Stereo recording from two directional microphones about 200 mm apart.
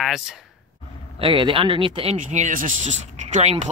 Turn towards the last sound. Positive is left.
turn(degrees=-35)  # may be behind; listen again after turning